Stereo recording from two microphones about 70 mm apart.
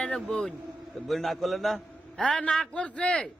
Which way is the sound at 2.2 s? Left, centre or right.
Centre.